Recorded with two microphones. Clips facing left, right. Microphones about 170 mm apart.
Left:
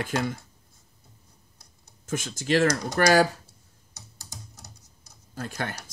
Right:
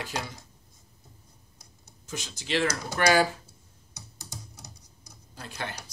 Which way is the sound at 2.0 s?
50° left (ahead or behind).